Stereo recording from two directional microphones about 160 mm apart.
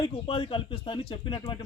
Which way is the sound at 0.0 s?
35° left (ahead or behind).